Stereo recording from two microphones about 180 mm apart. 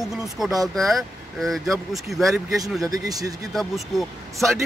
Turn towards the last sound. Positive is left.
turn(degrees=0)  # may be behind; listen again after turning